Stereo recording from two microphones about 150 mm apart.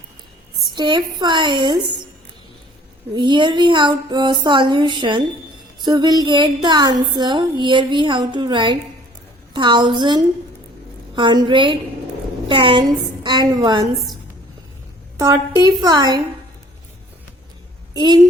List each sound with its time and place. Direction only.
0.8 s a woman's voice: 30° right (ahead or behind)
3.2 s a sound: 30° right (ahead or behind)
13.2 s a woman's voice: 30° right (ahead or behind)
15.5 s a woman's voice: 25° right (ahead or behind)
17.9 s a woman's voice: 30° right (ahead or behind)